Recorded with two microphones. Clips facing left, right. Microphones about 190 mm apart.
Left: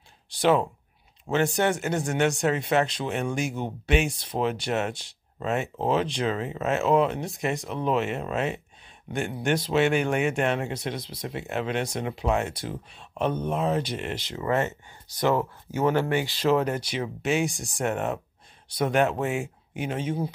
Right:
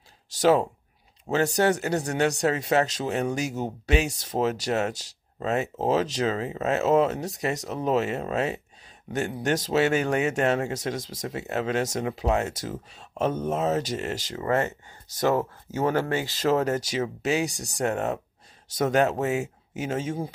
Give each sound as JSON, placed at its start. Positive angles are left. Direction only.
{"t": 0.3, "sound": "speech", "side_deg": -40}
{"t": 15.7, "sound": "speech", "side_deg": -20}
{"t": 16.3, "sound": "speech", "side_deg": -40}